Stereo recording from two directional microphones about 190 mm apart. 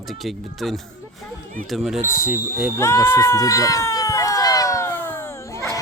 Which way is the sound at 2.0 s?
45° right (ahead or behind).